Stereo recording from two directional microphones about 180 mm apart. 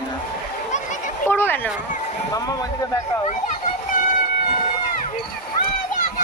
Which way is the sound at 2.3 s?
20° left (ahead or behind).